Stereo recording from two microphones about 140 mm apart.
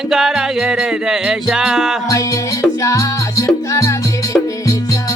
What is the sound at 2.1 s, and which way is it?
Music, 20° left (ahead or behind).